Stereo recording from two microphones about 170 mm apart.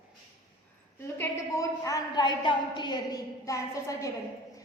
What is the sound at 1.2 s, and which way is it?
A woman's voice, 15° left (ahead or behind).